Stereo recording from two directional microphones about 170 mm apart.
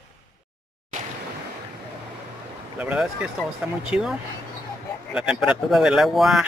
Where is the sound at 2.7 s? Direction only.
5° right (ahead or behind).